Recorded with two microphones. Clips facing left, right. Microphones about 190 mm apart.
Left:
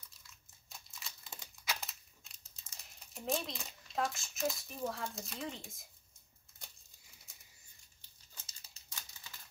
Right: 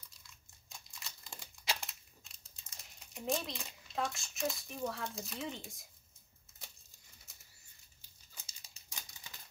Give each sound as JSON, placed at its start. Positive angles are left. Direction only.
{"t": 0.7, "sound": "crumpling", "side_deg": 0}
{"t": 1.8, "sound": "a sound", "side_deg": 0}
{"t": 3.3, "sound": "speech", "side_deg": 0}
{"t": 8.4, "sound": "typewriter", "side_deg": -15}